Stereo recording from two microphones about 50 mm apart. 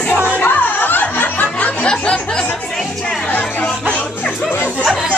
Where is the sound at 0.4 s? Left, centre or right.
Left.